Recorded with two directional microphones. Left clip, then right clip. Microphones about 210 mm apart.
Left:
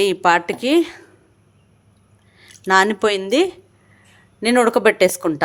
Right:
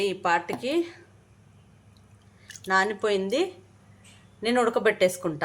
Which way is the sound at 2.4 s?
55° left (ahead or behind).